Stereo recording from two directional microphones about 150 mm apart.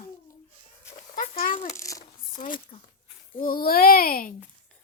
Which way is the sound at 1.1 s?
70° left (ahead or behind).